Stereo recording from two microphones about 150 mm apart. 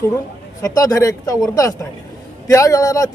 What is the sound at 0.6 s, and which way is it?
Speech, 25° left (ahead or behind).